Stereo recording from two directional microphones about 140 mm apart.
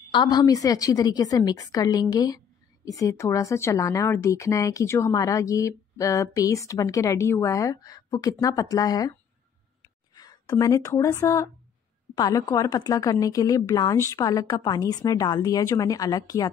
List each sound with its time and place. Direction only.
0.1 s a woman's voice: 30° left (ahead or behind)
10.1 s a woman's voice: 25° left (ahead or behind)